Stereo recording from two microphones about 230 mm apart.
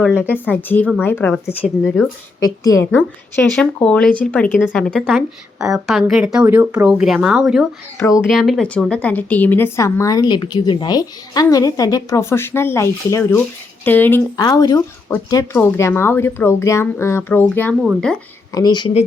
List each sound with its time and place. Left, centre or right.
0.0 s a woman's voice: centre
0.3 s speech: centre
2.6 s a woman's voice: centre
7.9 s speech: centre
8.3 s a woman's voice: centre
18.5 s speech: centre